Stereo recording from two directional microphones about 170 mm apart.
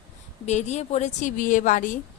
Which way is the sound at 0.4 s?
40° left (ahead or behind).